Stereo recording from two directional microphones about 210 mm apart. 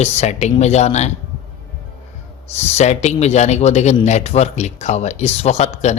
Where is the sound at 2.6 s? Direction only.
30° left (ahead or behind).